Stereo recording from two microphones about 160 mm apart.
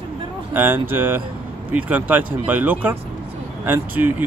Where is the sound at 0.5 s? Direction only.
15° right (ahead or behind).